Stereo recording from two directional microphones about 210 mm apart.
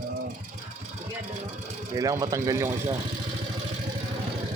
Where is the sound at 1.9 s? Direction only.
15° right (ahead or behind).